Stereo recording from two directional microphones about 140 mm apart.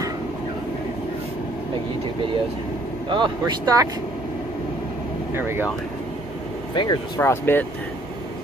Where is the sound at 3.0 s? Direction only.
35° right (ahead or behind).